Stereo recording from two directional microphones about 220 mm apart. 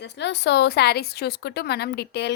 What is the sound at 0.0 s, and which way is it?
A woman's voice, 50° left (ahead or behind).